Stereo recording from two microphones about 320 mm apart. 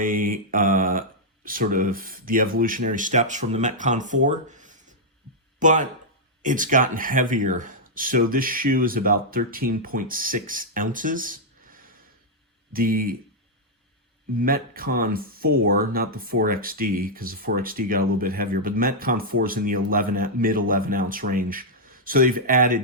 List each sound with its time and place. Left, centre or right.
0.0 s speech: right
14.3 s speech: right